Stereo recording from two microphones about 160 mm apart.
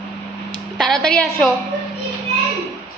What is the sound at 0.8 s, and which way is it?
Speech, centre (ahead or behind).